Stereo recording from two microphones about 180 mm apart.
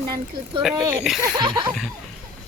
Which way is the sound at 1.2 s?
25° right (ahead or behind).